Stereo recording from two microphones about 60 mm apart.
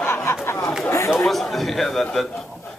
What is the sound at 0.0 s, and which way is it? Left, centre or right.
Chatter, left.